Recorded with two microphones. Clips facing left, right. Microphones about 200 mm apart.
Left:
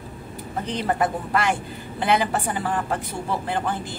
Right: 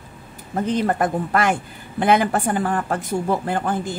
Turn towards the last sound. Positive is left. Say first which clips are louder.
# right 4 dB
turn(degrees=-50)  # may be behind; listen again after turning